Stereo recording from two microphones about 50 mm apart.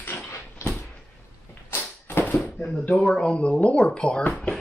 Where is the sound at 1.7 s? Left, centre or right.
Left.